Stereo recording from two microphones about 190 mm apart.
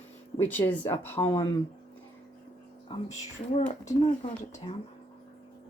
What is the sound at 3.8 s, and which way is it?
Speech, 40° left (ahead or behind).